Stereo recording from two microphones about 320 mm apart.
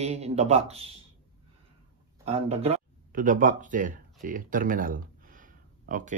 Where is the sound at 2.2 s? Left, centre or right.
Centre.